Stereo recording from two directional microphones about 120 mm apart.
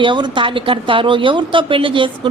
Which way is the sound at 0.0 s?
40° right (ahead or behind).